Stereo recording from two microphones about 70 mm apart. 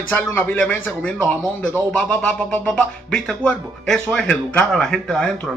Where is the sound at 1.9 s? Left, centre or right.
Centre.